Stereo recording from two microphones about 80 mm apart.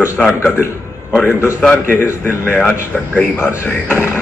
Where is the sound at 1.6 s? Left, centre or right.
Left.